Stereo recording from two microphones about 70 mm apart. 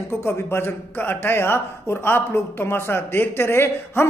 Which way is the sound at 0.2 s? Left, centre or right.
Left.